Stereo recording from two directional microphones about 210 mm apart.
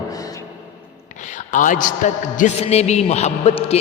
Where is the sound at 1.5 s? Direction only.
40° left (ahead or behind).